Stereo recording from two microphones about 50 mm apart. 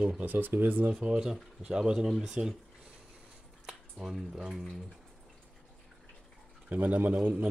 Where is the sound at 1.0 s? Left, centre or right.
Right.